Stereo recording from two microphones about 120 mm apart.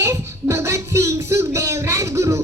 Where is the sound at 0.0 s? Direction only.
25° right (ahead or behind).